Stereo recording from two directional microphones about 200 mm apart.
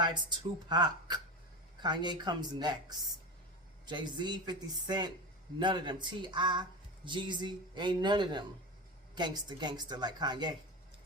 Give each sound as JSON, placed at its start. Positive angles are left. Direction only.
{"t": 0.0, "sound": "speech", "side_deg": -20}
{"t": 3.8, "sound": "speech", "side_deg": -20}